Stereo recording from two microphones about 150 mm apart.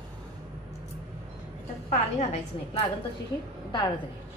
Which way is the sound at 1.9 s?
50° left (ahead or behind).